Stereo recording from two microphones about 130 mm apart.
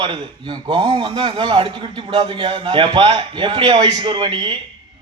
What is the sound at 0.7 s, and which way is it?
A man's voice, 40° right (ahead or behind).